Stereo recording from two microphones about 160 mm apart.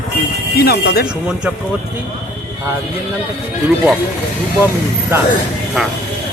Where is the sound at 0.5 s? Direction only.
85° left.